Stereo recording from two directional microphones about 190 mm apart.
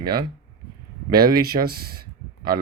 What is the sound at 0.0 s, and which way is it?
Speech, 55° right (ahead or behind).